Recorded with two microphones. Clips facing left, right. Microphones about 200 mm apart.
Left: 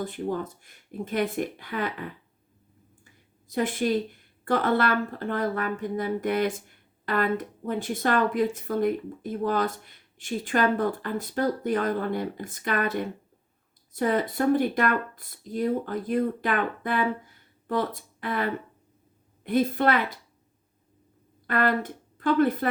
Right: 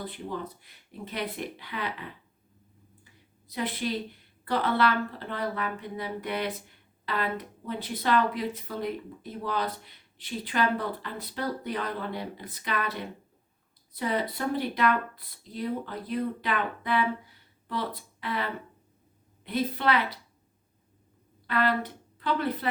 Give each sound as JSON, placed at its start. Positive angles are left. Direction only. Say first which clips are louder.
{"t": 0.0, "sound": "speech", "louder": "left 6 dB", "side_deg": 45}
{"t": 3.5, "sound": "speech", "louder": "left 6 dB", "side_deg": 45}
{"t": 21.4, "sound": "speech", "louder": "left 2 dB", "side_deg": 50}